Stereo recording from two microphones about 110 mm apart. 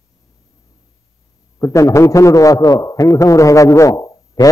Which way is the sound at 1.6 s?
30° left (ahead or behind).